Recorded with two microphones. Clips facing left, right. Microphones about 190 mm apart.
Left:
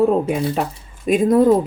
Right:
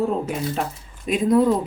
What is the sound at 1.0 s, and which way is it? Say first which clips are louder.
Speech: left 3 dB; 50° left (ahead or behind).